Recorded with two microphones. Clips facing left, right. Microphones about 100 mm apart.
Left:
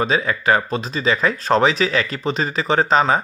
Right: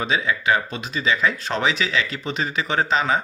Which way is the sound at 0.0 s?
40° left (ahead or behind).